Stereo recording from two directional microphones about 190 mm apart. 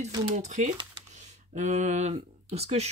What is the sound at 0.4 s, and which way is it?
Speech, 40° right (ahead or behind).